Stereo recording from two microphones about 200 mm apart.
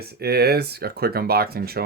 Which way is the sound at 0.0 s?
50° right (ahead or behind).